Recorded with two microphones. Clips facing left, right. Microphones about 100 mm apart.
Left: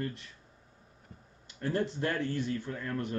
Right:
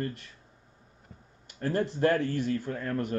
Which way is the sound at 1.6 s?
55° right (ahead or behind).